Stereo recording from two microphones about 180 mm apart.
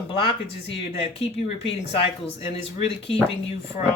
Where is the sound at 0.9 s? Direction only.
30° left (ahead or behind).